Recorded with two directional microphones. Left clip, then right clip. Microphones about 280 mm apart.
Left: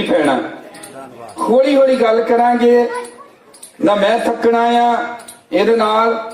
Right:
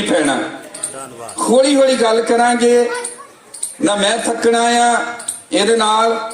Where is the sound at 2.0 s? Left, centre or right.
Centre.